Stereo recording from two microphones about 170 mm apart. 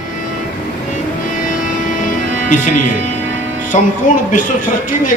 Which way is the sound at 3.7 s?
50° left (ahead or behind).